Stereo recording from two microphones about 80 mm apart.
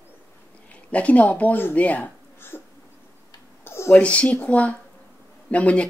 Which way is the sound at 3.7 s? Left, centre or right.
Left.